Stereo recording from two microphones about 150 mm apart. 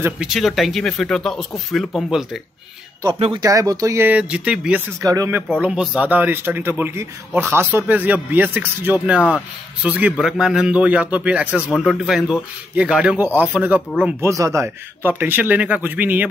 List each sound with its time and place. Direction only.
0.0 s speech: 5° right (ahead or behind)
3.2 s speech: 35° right (ahead or behind)
3.4 s speech: 25° right (ahead or behind); by 4.8 s 5° right (ahead or behind)
5.0 s speech: 20° right (ahead or behind)
5.6 s speech: 5° right (ahead or behind)
14.2 s speech: 20° right (ahead or behind)